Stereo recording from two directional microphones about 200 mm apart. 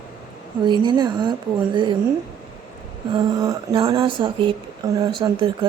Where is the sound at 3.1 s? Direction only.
20° right (ahead or behind).